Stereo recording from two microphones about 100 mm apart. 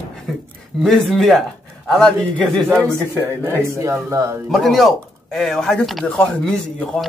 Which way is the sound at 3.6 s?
30° right (ahead or behind).